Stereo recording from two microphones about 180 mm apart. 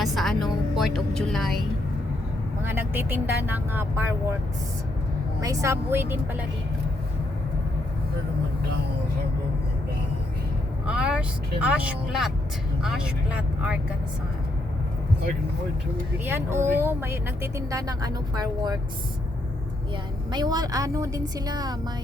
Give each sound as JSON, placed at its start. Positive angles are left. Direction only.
{"t": 0.0, "sound": "music", "side_deg": 0}
{"t": 2.6, "sound": "speech", "side_deg": -10}
{"t": 5.4, "sound": "speech", "side_deg": -15}
{"t": 10.8, "sound": "speech", "side_deg": -5}
{"t": 16.2, "sound": "speech", "side_deg": -10}
{"t": 20.3, "sound": "a woman's voice", "side_deg": -25}